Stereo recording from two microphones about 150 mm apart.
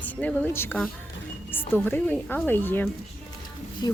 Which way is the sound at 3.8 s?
25° left (ahead or behind).